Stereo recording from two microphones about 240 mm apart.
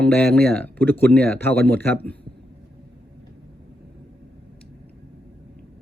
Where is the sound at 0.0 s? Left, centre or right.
Centre.